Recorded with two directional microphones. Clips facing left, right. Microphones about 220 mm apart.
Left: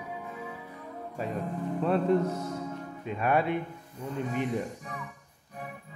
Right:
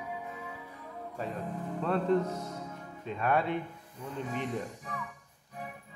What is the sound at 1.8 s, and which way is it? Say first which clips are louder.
Speech: left 3 dB; 10° left (ahead or behind).